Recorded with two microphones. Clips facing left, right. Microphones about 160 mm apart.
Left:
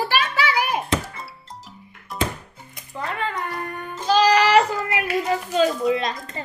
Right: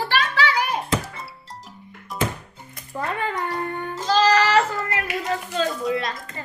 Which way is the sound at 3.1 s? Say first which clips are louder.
Right 1 dB; 20° right (ahead or behind).